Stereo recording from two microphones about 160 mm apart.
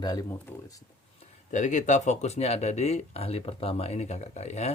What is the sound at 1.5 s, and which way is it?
Speech, 50° left (ahead or behind).